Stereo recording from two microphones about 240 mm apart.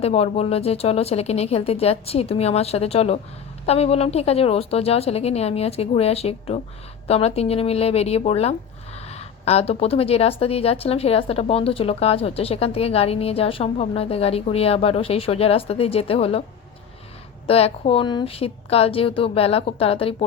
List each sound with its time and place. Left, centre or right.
0.0 s speech: left
17.4 s speech: left